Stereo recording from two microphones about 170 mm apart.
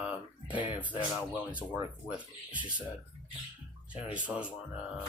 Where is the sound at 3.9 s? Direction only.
10° right (ahead or behind).